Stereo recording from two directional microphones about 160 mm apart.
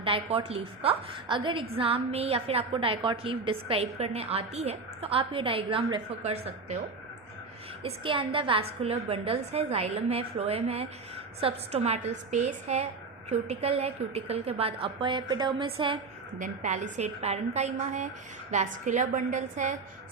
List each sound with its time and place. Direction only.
0.0 s a woman's voice: 35° right (ahead or behind)
7.9 s a woman's voice: 35° right (ahead or behind)
16.4 s a woman's voice: 50° right (ahead or behind)